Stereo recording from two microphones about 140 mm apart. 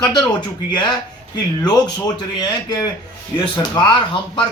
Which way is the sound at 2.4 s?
30° left (ahead or behind).